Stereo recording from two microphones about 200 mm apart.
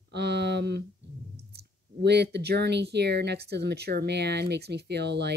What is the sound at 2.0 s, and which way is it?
Speech, 55° right (ahead or behind).